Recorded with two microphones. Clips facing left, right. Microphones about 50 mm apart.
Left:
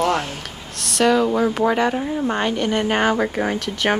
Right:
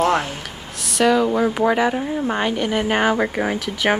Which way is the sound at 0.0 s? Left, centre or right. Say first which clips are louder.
Right 2 dB; centre.